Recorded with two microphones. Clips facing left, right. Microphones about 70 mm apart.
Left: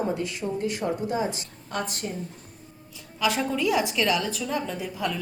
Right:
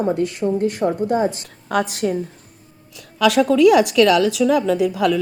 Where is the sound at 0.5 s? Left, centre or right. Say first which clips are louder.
Right 5 dB; right.